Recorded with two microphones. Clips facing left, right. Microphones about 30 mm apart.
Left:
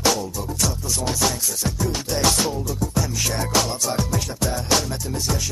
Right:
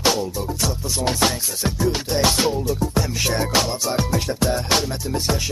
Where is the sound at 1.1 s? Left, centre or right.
Right.